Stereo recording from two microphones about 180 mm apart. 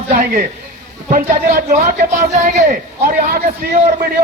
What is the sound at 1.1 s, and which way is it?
A man's voice, 50° right (ahead or behind).